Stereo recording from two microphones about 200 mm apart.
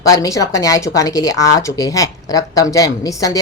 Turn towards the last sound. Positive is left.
turn(degrees=15)  # may be behind; listen again after turning